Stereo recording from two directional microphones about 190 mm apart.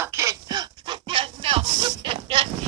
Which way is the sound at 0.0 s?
15° right (ahead or behind).